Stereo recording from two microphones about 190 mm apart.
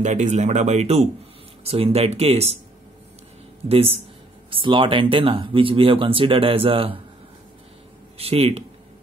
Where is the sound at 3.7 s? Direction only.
30° right (ahead or behind).